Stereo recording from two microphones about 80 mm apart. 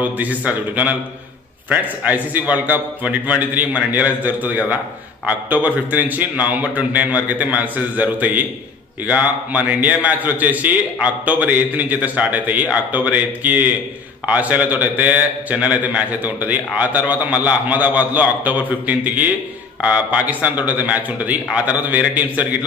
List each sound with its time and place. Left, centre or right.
0.0 s a man's voice: centre